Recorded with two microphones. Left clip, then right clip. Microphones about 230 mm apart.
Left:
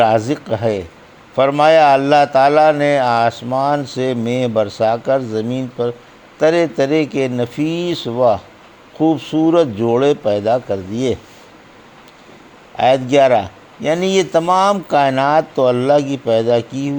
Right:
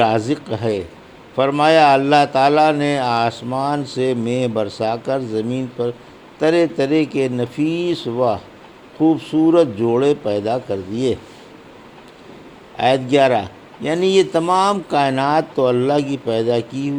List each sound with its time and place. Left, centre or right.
0.3 s speech: left
12.7 s a man's voice: left